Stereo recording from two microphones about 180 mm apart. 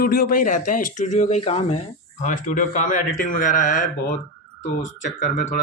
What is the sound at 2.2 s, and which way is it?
A man's voice, 45° left (ahead or behind).